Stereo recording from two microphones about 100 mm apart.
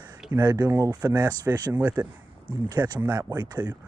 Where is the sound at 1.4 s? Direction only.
40° right (ahead or behind).